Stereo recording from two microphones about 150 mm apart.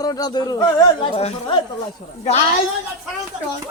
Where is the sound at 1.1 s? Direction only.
40° left (ahead or behind).